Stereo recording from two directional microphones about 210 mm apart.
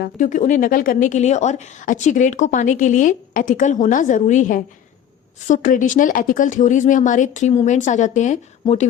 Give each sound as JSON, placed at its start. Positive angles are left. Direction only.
{"t": 0.0, "sound": "speech", "side_deg": 35}